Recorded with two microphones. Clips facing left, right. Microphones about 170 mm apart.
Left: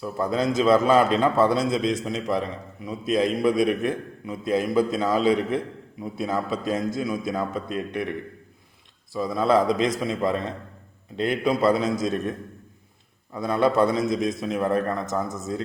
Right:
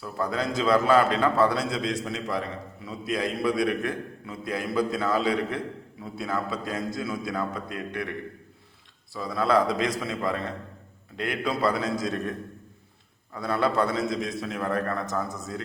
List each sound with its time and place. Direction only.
0.0 s a man's voice: 20° left (ahead or behind)
9.1 s a man's voice: 20° left (ahead or behind)
13.3 s a man's voice: 20° left (ahead or behind)